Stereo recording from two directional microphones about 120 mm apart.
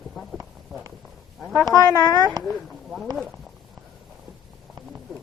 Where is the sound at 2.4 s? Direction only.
Centre (ahead or behind).